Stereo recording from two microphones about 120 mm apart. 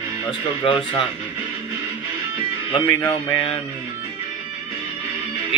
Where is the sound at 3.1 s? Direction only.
35° left (ahead or behind).